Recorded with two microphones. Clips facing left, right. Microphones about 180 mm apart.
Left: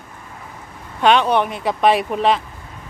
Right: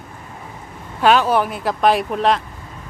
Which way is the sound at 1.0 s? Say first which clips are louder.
Even; 5° right (ahead or behind).